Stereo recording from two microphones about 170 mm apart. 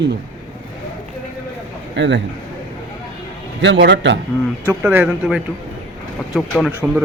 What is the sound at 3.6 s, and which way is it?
Speech, 90° right.